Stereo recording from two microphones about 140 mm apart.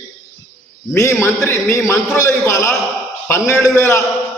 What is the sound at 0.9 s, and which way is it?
Speech, 20° left (ahead or behind).